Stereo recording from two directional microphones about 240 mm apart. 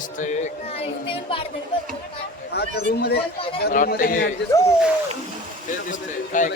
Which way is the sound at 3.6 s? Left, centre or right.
Left.